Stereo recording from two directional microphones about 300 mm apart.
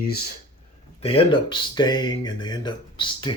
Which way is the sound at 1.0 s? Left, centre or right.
Centre.